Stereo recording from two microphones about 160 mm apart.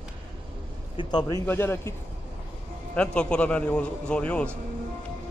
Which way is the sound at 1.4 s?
15° left (ahead or behind).